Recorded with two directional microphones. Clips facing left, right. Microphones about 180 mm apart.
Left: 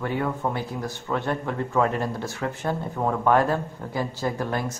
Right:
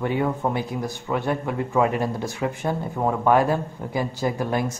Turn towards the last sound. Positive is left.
turn(degrees=-15)  # may be behind; listen again after turning